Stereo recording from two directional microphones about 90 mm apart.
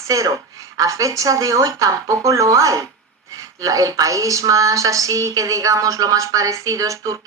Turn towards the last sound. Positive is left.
turn(degrees=-40)  # may be behind; listen again after turning